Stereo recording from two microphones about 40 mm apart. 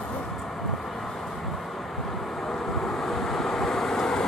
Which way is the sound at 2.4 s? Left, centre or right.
Centre.